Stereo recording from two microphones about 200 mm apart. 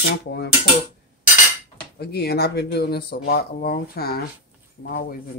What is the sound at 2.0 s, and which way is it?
Speech, 55° left (ahead or behind).